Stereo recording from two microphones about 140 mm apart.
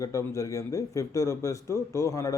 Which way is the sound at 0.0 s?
20° left (ahead or behind).